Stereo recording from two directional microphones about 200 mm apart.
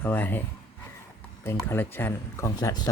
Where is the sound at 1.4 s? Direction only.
10° left (ahead or behind).